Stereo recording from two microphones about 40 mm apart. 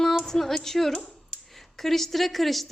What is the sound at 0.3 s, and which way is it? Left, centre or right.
A woman's voice, centre.